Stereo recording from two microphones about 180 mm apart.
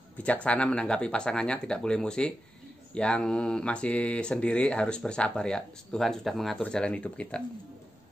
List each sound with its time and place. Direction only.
0.2 s speech: 5° left (ahead or behind)